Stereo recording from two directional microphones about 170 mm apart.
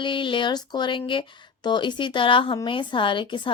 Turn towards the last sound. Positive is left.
turn(degrees=30)  # may be behind; listen again after turning